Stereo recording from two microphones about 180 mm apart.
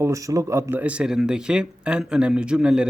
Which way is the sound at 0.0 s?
20° right (ahead or behind).